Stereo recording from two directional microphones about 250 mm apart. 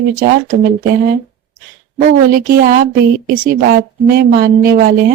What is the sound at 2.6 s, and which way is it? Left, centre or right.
Speech, right.